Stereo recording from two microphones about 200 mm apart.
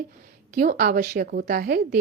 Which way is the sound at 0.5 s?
45° right (ahead or behind).